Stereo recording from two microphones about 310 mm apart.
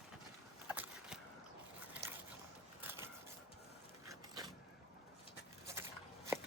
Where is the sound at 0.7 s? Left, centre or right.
Centre.